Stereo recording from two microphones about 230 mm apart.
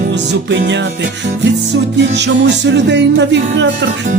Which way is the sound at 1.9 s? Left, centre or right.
Right.